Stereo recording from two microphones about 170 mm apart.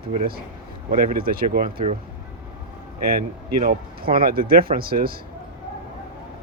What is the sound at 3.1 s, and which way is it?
Speech, 60° right (ahead or behind).